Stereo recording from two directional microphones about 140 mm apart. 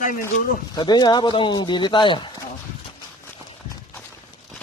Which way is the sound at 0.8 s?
30° left (ahead or behind).